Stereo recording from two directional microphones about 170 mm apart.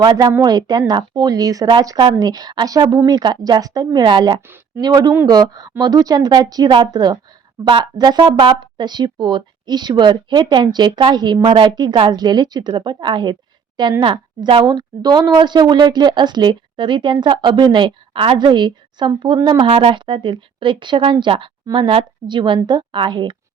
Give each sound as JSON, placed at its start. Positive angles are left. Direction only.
{"t": 0.0, "sound": "speech", "side_deg": -25}